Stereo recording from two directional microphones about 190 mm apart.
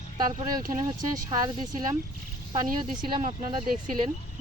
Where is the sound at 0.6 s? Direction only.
45° right (ahead or behind).